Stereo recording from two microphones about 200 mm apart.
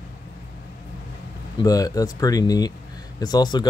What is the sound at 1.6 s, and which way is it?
Speech, 20° left (ahead or behind).